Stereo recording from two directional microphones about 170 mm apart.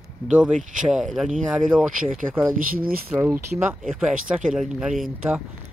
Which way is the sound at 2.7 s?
60° right (ahead or behind).